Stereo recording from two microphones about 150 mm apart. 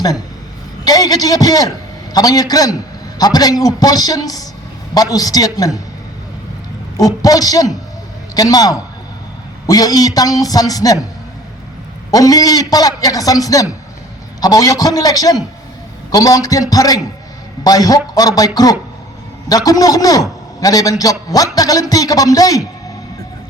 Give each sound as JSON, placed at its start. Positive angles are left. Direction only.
{"t": 0.9, "sound": "a man's voice", "side_deg": 25}
{"t": 6.9, "sound": "a man's voice", "side_deg": 25}
{"t": 12.1, "sound": "a man's voice", "side_deg": 25}